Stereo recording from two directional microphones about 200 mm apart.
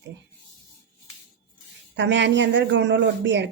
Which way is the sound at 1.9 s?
60° right (ahead or behind).